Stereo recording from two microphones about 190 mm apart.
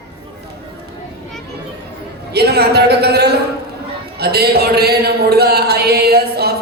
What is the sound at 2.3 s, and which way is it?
A man's voice, 60° right (ahead or behind).